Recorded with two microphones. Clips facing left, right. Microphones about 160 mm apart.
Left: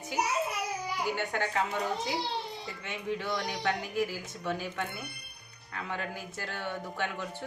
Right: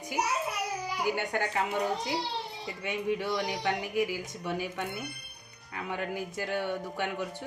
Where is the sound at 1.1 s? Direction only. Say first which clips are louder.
Right 1 dB; 15° right (ahead or behind).